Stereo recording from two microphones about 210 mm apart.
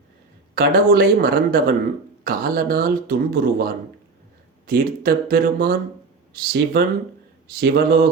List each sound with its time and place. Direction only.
0.5 s speech: 45° right (ahead or behind)